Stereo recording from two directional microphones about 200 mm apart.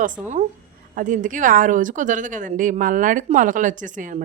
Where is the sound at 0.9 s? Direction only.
40° right (ahead or behind).